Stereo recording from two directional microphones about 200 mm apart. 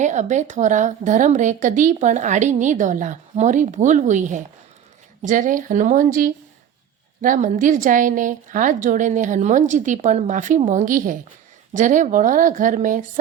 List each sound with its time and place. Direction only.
0.0 s a woman's voice: 35° right (ahead or behind)